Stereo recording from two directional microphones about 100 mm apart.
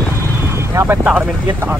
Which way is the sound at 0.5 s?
25° right (ahead or behind).